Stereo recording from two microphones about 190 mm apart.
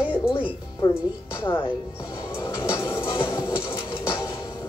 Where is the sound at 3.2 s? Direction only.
15° left (ahead or behind).